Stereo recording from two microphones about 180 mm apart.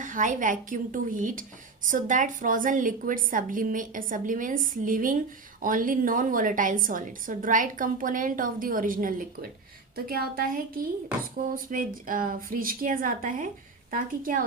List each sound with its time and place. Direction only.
0.0 s a woman's voice: 45° right (ahead or behind)